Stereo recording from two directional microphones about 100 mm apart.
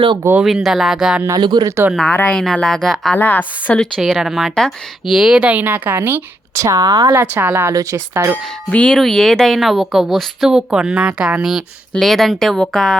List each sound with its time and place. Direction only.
0.4 s a woman's voice: 5° right (ahead or behind)
1.3 s speech: 45° right (ahead or behind)
1.6 s speech: 25° right (ahead or behind)
1.9 s a woman's voice: 5° left (ahead or behind)
3.2 s a woman's voice: 15° left (ahead or behind)
3.8 s speech: 5° left (ahead or behind); by 7.1 s 40° right (ahead or behind)
7.1 s speech: 25° right (ahead or behind)
8.7 s a woman's voice: 10° left (ahead or behind)